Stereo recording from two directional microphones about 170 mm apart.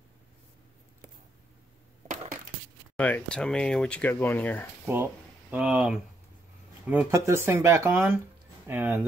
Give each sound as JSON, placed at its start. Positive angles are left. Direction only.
{"t": 3.0, "sound": "speech", "side_deg": 5}
{"t": 5.5, "sound": "speech", "side_deg": -5}